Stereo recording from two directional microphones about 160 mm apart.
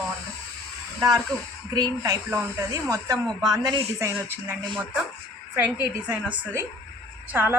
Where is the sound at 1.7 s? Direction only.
25° right (ahead or behind).